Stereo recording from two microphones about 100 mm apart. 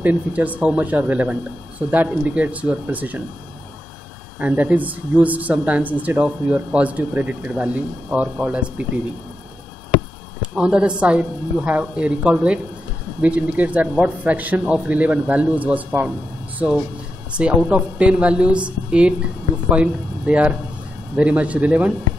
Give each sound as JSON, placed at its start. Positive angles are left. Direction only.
{"t": 0.0, "sound": "speech", "side_deg": -15}
{"t": 4.4, "sound": "speech", "side_deg": -15}
{"t": 10.4, "sound": "speech", "side_deg": -10}